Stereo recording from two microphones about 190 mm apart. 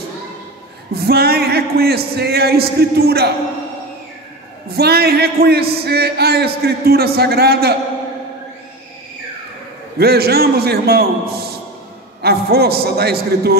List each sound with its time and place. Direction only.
0.9 s a man's voice: 55° right (ahead or behind)
4.6 s a man's voice: 55° right (ahead or behind)
9.9 s a man's voice: 55° right (ahead or behind)